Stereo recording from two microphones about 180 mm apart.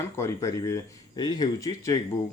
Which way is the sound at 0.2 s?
15° left (ahead or behind).